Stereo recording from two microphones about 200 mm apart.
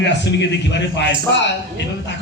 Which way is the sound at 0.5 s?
60° left (ahead or behind).